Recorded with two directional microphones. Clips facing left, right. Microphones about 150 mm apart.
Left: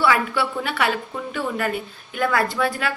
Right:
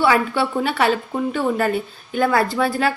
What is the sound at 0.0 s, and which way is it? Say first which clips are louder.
A woman's voice: right 3 dB; 30° right (ahead or behind).